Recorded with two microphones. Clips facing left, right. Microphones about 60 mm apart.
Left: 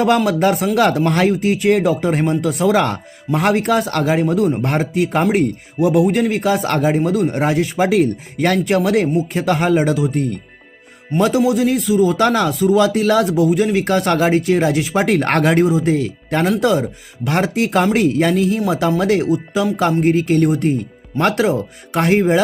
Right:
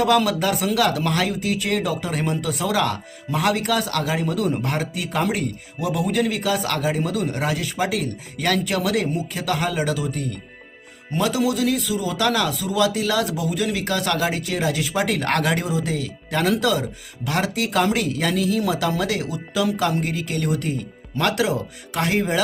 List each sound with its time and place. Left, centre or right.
0.3 s a man's voice: left
7.0 s a man's voice: left